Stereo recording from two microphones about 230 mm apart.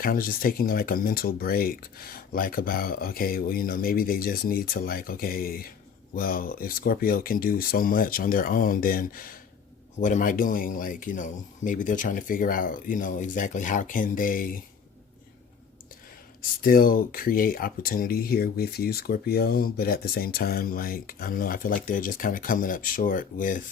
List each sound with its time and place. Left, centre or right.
0.0 s speech: left
16.4 s speech: left